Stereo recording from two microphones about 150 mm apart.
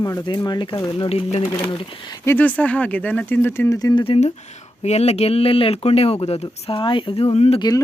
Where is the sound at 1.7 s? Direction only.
30° left (ahead or behind).